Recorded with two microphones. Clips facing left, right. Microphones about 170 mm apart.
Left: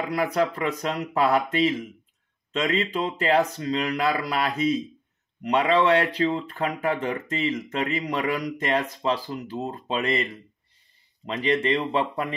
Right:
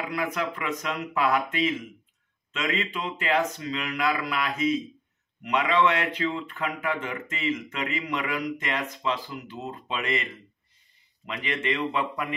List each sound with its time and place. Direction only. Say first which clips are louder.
0.1 s speech: left 8 dB; 35° left (ahead or behind)